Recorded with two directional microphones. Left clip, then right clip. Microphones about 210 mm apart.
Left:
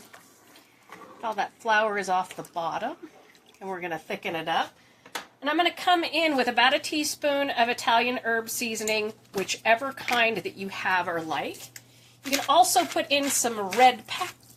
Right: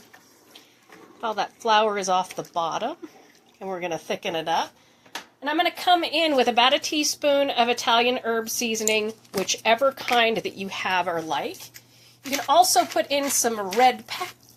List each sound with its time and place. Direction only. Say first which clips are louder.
1.2 s a woman's voice: right 3 dB; 40° right (ahead or behind)
5.4 s a woman's voice: right 1 dB; 25° right (ahead or behind)